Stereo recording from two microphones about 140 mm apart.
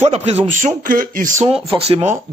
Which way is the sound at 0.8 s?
80° right.